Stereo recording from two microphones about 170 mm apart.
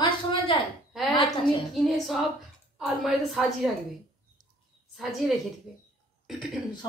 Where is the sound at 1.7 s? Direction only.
Centre (ahead or behind).